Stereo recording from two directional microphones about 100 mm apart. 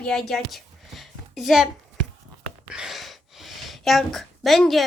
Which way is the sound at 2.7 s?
Centre (ahead or behind).